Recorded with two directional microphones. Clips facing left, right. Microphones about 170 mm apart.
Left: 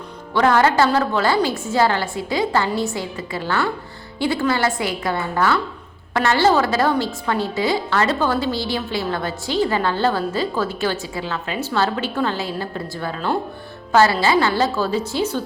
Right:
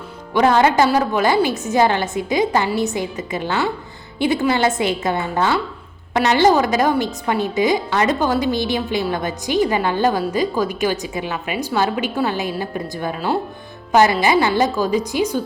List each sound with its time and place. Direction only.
0.3 s a woman's voice: 20° right (ahead or behind)